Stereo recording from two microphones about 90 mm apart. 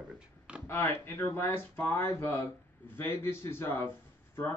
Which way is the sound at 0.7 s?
25° left (ahead or behind).